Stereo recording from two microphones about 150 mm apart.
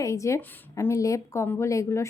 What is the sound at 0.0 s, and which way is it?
A woman's voice, 20° left (ahead or behind).